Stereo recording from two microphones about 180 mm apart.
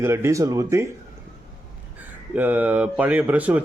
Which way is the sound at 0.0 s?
15° right (ahead or behind).